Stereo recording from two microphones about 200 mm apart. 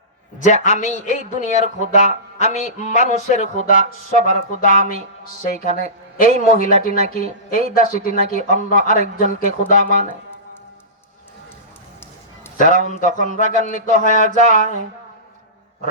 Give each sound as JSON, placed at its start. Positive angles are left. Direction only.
{"t": 0.3, "sound": "a man's voice", "side_deg": 35}
{"t": 5.4, "sound": "a woman's voice", "side_deg": 40}
{"t": 12.5, "sound": "a man's voice", "side_deg": 40}